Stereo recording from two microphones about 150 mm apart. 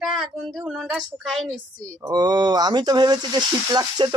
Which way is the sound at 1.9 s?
25° right (ahead or behind).